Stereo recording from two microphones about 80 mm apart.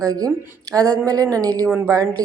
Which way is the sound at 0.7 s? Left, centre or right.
Right.